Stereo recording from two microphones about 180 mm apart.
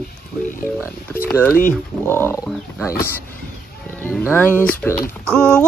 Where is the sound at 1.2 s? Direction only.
5° left (ahead or behind).